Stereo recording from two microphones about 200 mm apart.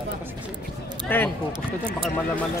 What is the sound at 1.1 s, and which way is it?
Speech, 10° left (ahead or behind).